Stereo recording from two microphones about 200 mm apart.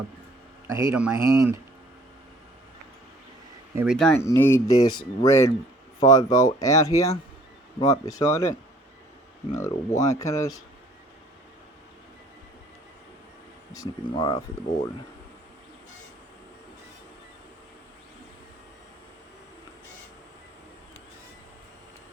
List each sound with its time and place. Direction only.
0.7 s speech: 15° right (ahead or behind)
3.9 s speech: 5° left (ahead or behind)
9.6 s speech: 15° left (ahead or behind)
13.7 s speech: 20° left (ahead or behind)